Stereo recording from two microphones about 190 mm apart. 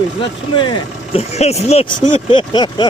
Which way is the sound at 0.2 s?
25° left (ahead or behind).